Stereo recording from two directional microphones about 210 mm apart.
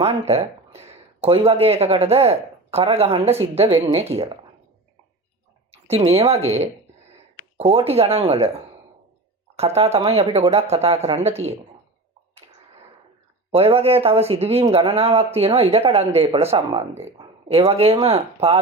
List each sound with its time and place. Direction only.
0.0 s speech: 30° right (ahead or behind)
5.9 s speech: 30° right (ahead or behind)
9.6 s speech: 30° right (ahead or behind)
13.5 s speech: 30° right (ahead or behind)